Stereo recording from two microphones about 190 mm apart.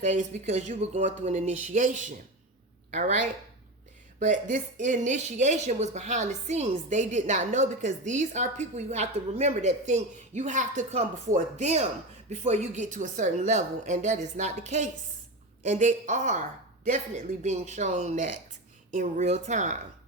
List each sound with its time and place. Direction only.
0.0 s a woman's voice: 40° right (ahead or behind)
4.2 s a woman's voice: 40° right (ahead or behind)
17.4 s a woman's voice: 40° right (ahead or behind)